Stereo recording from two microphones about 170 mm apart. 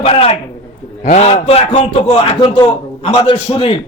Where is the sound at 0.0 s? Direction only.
35° left (ahead or behind).